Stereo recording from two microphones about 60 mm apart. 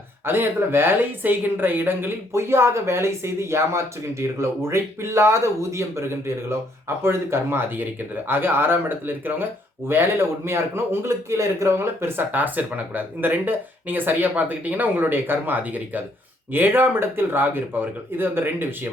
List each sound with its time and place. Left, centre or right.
0.3 s a man's voice: right